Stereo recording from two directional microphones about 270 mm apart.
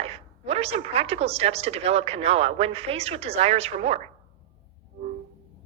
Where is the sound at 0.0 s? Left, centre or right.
Right.